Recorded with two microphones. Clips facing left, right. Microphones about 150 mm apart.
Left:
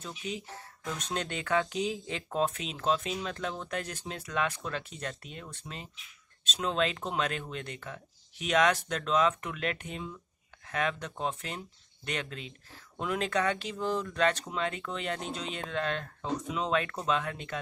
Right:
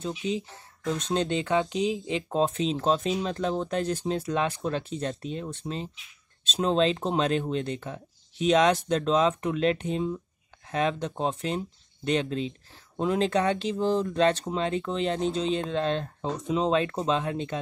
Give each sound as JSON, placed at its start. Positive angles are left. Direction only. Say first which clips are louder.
{"t": 0.0, "sound": "speech", "louder": "right 9 dB", "side_deg": -25}